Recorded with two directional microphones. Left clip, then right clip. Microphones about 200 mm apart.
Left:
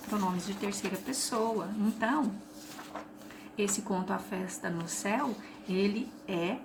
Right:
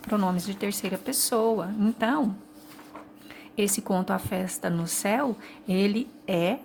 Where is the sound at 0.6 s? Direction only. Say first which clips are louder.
Right 6 dB; 55° right (ahead or behind).